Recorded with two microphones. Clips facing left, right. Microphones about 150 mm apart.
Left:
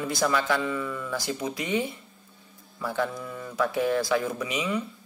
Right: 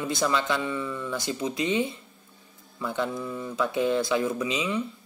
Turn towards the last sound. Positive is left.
turn(degrees=-20)  # may be behind; listen again after turning